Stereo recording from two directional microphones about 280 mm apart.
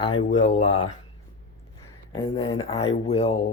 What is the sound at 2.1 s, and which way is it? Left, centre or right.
Speech, centre.